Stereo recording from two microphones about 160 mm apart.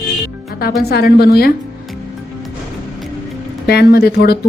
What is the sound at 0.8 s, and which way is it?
Speech, 80° left.